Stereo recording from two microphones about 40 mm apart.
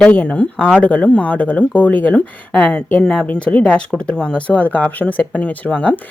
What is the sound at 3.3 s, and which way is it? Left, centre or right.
A woman's voice, left.